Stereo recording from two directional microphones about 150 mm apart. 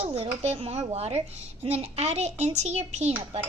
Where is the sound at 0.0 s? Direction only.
40° right (ahead or behind).